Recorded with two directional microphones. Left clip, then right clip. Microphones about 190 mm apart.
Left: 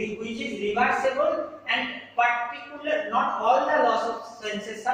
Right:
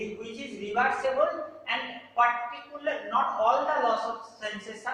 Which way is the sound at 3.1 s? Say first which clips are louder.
Left 2 dB; centre (ahead or behind).